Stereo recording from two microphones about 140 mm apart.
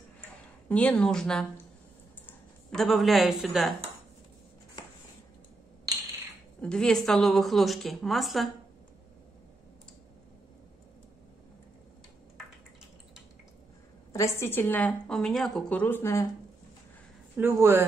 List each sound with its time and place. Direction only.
0.7 s a woman's voice: 10° left (ahead or behind)
6.6 s a woman's voice: 5° left (ahead or behind)
14.1 s a woman's voice: 20° left (ahead or behind)
17.4 s speech: 20° right (ahead or behind)